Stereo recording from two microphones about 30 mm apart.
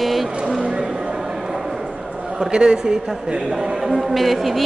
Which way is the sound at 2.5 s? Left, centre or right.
Right.